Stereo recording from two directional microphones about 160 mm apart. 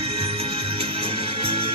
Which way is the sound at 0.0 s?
35° right (ahead or behind).